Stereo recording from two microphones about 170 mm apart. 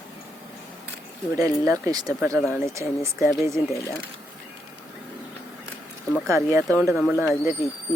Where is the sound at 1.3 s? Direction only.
20° right (ahead or behind).